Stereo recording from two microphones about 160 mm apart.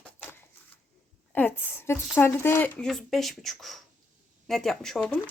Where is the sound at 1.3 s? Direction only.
10° left (ahead or behind).